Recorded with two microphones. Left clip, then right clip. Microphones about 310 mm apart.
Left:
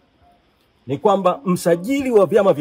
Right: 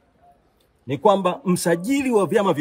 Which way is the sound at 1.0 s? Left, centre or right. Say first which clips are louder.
Left 2 dB; centre.